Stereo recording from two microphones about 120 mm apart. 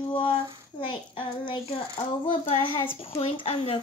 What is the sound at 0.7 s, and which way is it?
Child singing, 45° left (ahead or behind).